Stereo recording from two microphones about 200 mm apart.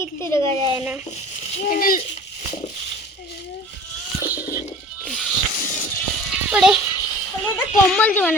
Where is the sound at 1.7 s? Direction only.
45° left (ahead or behind).